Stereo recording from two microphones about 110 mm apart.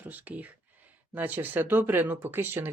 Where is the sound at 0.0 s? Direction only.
15° right (ahead or behind).